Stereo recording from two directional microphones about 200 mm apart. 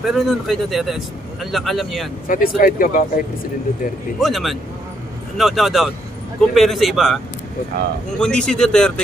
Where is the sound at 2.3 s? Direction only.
45° left (ahead or behind).